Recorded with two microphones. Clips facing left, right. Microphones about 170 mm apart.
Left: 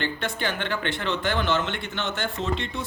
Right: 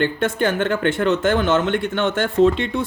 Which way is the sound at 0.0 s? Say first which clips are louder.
Right 9 dB; 50° right (ahead or behind).